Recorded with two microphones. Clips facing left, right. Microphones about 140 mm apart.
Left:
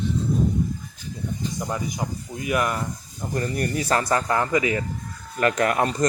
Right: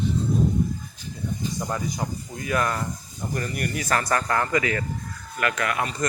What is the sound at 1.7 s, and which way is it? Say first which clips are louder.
Speech: even; 15° left (ahead or behind).